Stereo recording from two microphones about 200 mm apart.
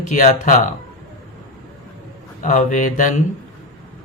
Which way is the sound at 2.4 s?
40° left (ahead or behind).